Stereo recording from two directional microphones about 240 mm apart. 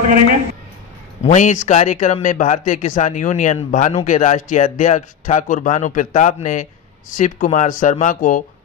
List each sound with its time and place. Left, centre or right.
1.2 s speech: left